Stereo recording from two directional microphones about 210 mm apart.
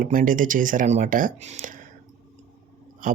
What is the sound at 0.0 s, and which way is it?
Speech, 40° right (ahead or behind).